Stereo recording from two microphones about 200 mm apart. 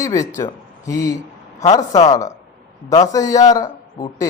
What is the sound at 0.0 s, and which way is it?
A man's voice, 15° left (ahead or behind).